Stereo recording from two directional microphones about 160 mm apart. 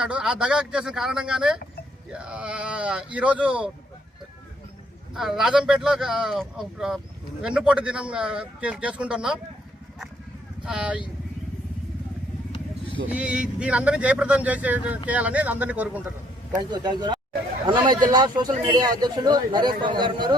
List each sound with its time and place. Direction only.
0.0 s speech: 5° right (ahead or behind)
5.1 s speech: centre (ahead or behind)
10.7 s speech: 5° right (ahead or behind)
13.1 s speech: 10° right (ahead or behind)
16.6 s speech: 25° right (ahead or behind)